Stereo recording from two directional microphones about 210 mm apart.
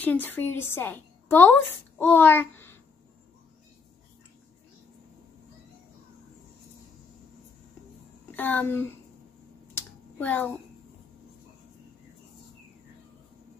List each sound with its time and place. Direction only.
0.0 s a woman's voice: 10° left (ahead or behind)
8.4 s speech: 10° left (ahead or behind)
9.8 s a sound: 10° left (ahead or behind)